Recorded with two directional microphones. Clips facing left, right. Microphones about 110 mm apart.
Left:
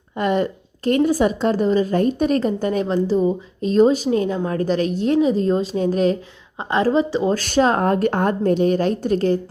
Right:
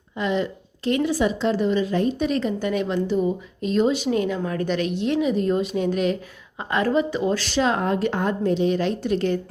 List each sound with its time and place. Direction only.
0.2 s a woman's voice: 50° left (ahead or behind); by 7.3 s 30° left (ahead or behind)
7.3 s a woman's voice: 50° left (ahead or behind)